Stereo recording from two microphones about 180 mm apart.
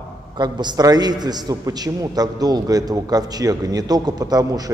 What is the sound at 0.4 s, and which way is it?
A man's voice, 25° right (ahead or behind).